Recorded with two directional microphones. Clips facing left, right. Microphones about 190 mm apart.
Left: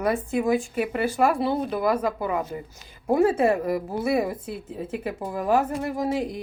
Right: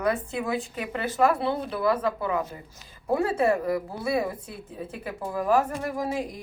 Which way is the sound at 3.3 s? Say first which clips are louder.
Left 2 dB; 20° left (ahead or behind).